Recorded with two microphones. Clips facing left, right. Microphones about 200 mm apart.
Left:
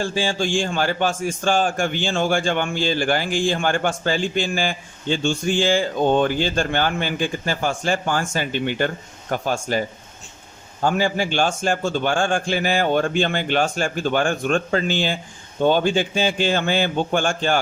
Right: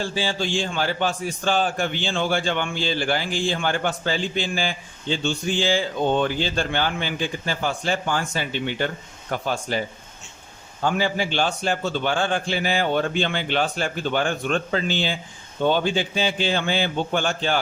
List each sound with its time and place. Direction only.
0.0 s a man's voice: 50° left (ahead or behind)
10.8 s a man's voice: 45° left (ahead or behind)